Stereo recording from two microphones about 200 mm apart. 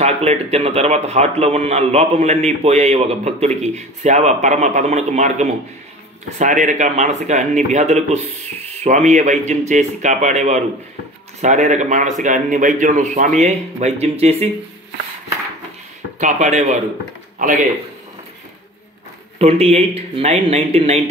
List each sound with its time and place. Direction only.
0.0 s a man's voice: 30° right (ahead or behind)
16.2 s a man's voice: 35° right (ahead or behind)
19.3 s speech: 30° right (ahead or behind)